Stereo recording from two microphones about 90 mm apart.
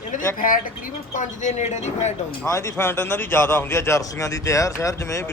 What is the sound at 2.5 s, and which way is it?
Speech, 30° left (ahead or behind).